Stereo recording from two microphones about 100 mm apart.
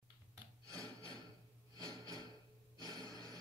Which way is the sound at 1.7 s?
35° right (ahead or behind).